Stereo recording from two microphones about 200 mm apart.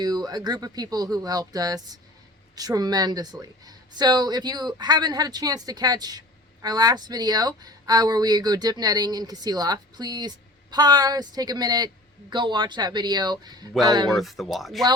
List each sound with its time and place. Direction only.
0.0 s speech: 20° right (ahead or behind)
14.1 s speech: centre (ahead or behind)